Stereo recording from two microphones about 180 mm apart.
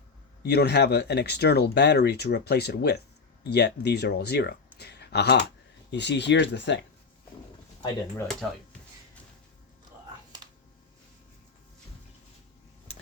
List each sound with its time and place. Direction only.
0.4 s speech: 65° left (ahead or behind)